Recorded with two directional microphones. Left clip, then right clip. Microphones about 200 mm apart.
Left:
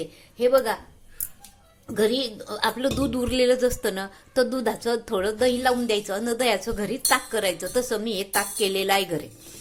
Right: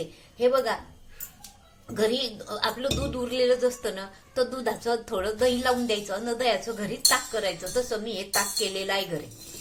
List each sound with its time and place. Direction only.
0.3 s speech: 40° left (ahead or behind)
1.9 s speech: 35° left (ahead or behind)